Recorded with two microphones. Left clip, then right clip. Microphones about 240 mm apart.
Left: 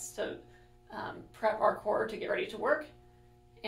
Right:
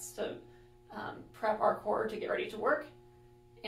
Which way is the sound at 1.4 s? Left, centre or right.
Left.